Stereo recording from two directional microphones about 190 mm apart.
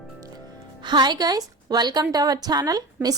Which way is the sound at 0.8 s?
25° right (ahead or behind).